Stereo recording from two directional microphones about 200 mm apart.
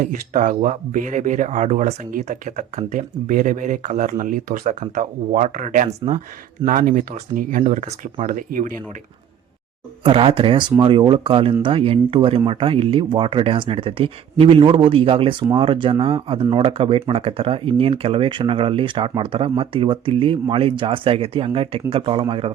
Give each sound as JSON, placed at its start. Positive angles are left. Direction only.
{"t": 0.0, "sound": "speech", "side_deg": -40}
{"t": 10.0, "sound": "speech", "side_deg": -25}